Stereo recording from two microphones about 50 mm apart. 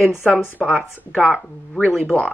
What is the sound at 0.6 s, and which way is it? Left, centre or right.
Speech, centre.